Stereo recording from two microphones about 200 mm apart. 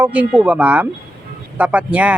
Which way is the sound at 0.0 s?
5° right (ahead or behind).